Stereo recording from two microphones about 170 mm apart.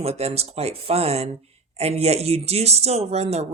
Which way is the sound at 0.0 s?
35° right (ahead or behind).